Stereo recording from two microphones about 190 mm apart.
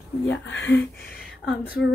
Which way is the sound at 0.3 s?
75° left (ahead or behind).